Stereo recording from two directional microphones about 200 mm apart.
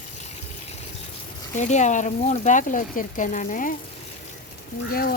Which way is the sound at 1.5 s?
35° left (ahead or behind).